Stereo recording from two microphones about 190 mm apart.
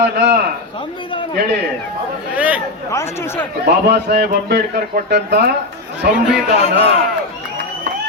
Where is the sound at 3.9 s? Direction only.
60° right (ahead or behind).